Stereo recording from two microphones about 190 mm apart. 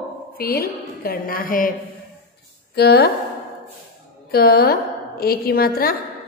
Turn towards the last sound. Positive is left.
turn(degrees=50)  # may be behind; listen again after turning